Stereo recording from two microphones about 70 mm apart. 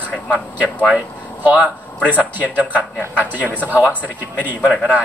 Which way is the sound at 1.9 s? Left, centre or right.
Left.